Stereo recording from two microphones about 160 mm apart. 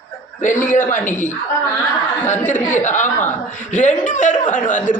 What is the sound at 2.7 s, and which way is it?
A man's voice, 50° left (ahead or behind).